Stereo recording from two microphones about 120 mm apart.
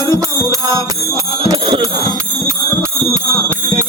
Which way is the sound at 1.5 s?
30° right (ahead or behind).